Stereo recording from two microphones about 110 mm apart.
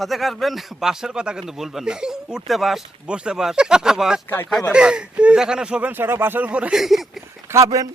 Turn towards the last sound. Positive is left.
turn(degrees=-30)  # may be behind; listen again after turning